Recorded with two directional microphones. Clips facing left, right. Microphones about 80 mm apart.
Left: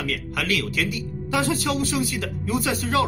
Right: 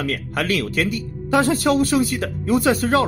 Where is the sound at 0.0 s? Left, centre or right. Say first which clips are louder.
Right 4 dB; right.